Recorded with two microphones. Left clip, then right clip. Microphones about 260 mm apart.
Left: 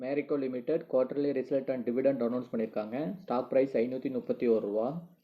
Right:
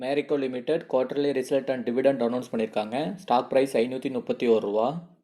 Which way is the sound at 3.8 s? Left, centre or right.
Centre.